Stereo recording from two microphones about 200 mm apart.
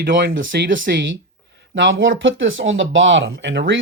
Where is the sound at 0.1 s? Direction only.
65° right (ahead or behind).